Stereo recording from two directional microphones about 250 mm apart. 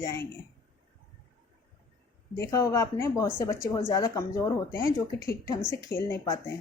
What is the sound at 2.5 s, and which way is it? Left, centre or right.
A woman's voice, centre.